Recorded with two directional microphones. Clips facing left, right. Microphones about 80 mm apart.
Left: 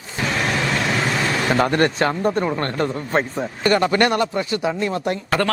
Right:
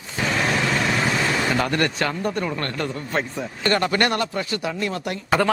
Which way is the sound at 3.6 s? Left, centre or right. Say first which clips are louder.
Left 4 dB; centre.